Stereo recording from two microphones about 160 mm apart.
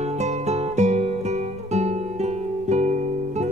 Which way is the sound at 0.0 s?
45° right (ahead or behind).